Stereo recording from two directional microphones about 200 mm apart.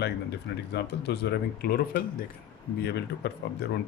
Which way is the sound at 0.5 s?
55° left (ahead or behind).